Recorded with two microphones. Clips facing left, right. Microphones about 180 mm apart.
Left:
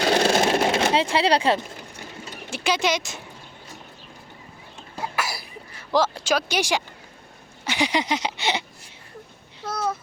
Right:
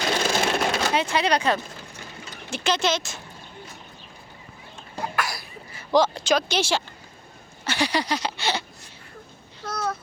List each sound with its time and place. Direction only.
0.1 s vehicle: 35° left (ahead or behind)
0.4 s a sound: 25° left (ahead or behind)
2.5 s speech: 10° left (ahead or behind)
5.1 s cough: 5° left (ahead or behind)
5.9 s speech: 5° left (ahead or behind)
7.6 s a sound: 15° left (ahead or behind)